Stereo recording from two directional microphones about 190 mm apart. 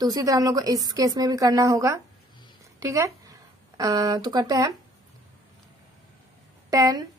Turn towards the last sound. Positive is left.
turn(degrees=-20)  # may be behind; listen again after turning